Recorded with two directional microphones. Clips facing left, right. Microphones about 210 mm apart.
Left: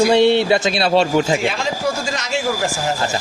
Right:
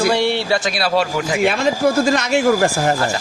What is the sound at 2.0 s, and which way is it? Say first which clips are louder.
Speech: right 7 dB; 55° right (ahead or behind).